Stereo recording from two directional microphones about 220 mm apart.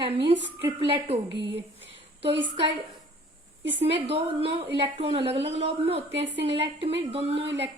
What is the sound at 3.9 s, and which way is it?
Speech, 25° right (ahead or behind).